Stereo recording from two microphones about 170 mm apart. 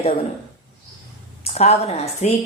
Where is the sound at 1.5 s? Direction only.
40° left (ahead or behind).